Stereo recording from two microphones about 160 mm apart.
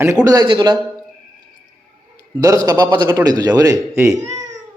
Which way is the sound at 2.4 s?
25° right (ahead or behind).